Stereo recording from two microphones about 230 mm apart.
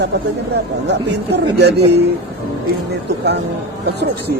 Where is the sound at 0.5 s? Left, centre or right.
Right.